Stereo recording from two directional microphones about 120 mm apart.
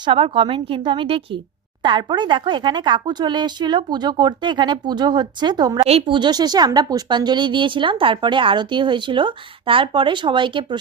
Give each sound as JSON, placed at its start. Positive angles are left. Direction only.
{"t": 0.0, "sound": "a woman's voice", "side_deg": -45}
{"t": 5.8, "sound": "speech", "side_deg": -55}
{"t": 6.1, "sound": "a woman's voice", "side_deg": -35}